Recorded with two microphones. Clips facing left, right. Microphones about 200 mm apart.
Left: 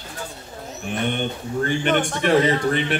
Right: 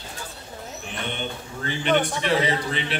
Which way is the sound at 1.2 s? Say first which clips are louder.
Left 8 dB; 50° left (ahead or behind).